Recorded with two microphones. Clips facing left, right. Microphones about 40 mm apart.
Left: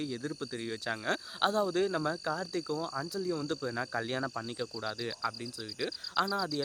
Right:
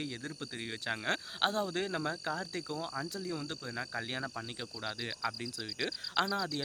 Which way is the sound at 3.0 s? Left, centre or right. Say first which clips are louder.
Left 4 dB; centre.